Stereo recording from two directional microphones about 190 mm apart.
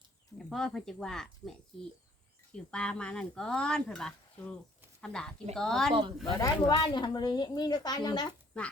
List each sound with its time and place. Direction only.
0.3 s speech: 5° left (ahead or behind)
5.9 s speech: 25° right (ahead or behind)
6.4 s a woman's voice: 20° left (ahead or behind)
8.5 s speech: 5° left (ahead or behind)